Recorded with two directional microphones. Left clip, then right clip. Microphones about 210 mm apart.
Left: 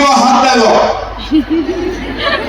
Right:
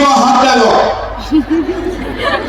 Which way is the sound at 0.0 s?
35° left (ahead or behind).